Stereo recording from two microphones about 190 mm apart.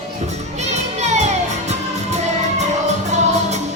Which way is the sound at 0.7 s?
35° right (ahead or behind).